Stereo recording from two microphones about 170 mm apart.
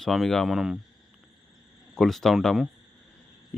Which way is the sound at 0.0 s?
Centre (ahead or behind).